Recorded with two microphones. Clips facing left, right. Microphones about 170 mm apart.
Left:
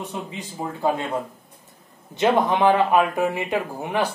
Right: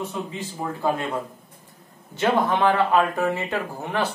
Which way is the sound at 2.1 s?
20° left (ahead or behind).